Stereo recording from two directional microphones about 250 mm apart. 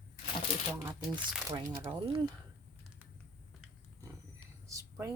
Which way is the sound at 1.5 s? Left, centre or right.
Centre.